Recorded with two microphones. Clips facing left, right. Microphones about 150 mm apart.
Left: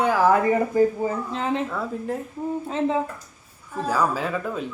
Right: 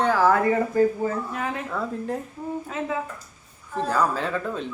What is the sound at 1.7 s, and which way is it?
Speech, centre (ahead or behind).